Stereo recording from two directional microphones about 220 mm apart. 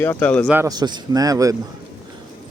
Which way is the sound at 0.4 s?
10° right (ahead or behind).